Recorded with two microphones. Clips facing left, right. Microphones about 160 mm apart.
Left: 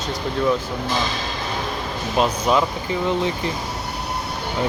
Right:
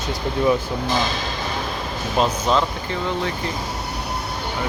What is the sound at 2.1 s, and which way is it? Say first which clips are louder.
Speech: left 1 dB; 5° left (ahead or behind).